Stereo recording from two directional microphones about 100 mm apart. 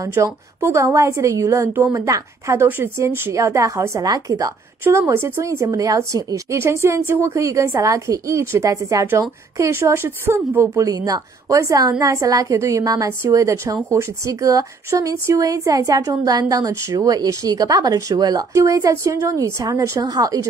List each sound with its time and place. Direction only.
0.0 s a woman's voice: 30° right (ahead or behind)
4.8 s a woman's voice: 25° right (ahead or behind)